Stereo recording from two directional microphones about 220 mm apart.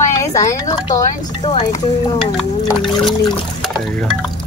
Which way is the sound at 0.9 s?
25° left (ahead or behind).